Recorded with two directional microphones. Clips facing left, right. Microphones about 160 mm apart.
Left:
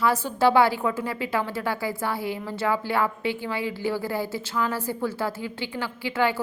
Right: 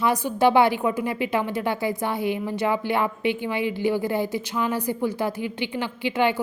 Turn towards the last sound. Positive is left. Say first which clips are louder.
# right 2 dB
turn(degrees=-20)  # may be behind; listen again after turning